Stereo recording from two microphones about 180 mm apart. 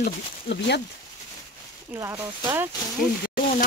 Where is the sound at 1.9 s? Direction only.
15° right (ahead or behind).